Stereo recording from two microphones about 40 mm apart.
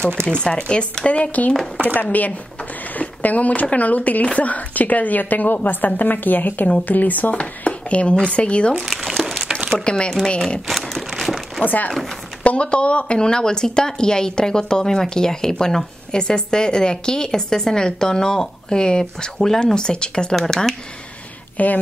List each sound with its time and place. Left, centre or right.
0.4 s speech: left
1.0 s speech: left
3.0 s a woman's voice: left
7.3 s speech: left
8.7 s crumpling: centre
9.2 s a sound: centre
10.0 s speech: centre
10.7 s a sound: centre
11.6 s a woman's voice: left
12.4 s speech: left
20.3 s speech: centre
21.6 s speech: left